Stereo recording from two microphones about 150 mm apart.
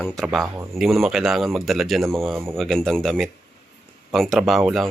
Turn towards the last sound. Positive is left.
turn(degrees=0)  # may be behind; listen again after turning